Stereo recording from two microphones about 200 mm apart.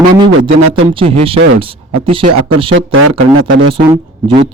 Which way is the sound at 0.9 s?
30° right (ahead or behind).